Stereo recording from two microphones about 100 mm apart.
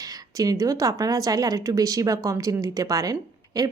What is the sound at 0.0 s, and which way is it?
A woman's voice, 35° right (ahead or behind).